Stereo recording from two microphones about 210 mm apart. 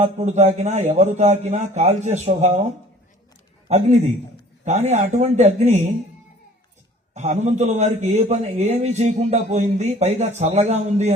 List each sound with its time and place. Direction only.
0.0 s a man's voice: 35° right (ahead or behind)
7.1 s a man's voice: 35° right (ahead or behind)